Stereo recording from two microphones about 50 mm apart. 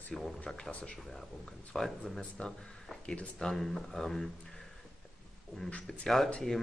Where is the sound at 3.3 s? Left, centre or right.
Centre.